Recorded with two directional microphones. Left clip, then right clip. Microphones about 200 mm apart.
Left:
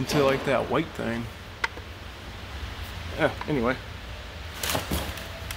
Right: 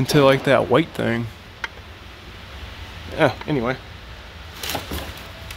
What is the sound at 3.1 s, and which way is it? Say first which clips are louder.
Speech: right 6 dB; 45° right (ahead or behind).